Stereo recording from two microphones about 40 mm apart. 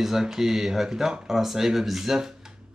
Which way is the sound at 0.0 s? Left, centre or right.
Centre.